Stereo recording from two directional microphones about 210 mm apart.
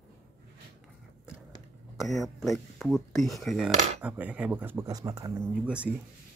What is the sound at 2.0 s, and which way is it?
Speech, centre (ahead or behind).